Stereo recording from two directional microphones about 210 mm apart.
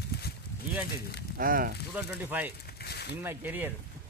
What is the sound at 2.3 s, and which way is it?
Speech, 10° right (ahead or behind).